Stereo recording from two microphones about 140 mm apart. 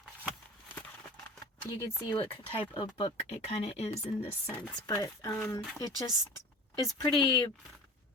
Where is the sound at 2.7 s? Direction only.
35° left (ahead or behind).